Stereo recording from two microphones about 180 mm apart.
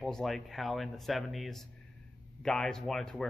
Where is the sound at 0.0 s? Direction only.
Centre (ahead or behind).